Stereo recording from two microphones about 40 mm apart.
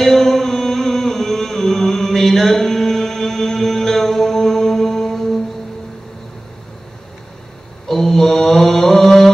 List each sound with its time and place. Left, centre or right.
0.0 s music: centre
7.9 s mantra: centre